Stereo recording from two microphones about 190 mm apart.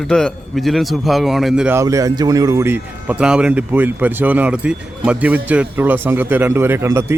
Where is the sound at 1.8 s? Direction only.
15° right (ahead or behind).